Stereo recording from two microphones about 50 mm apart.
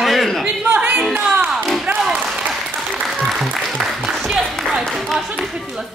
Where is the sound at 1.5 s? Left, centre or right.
Centre.